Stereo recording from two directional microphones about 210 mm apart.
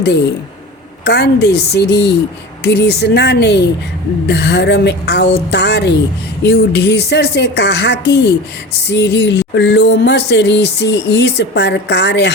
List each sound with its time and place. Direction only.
1.0 s a woman's voice: 50° left (ahead or behind)